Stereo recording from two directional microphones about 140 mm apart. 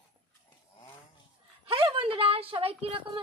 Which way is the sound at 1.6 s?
40° right (ahead or behind).